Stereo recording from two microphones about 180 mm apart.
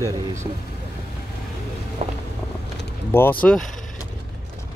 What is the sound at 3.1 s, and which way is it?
Speech, 15° left (ahead or behind).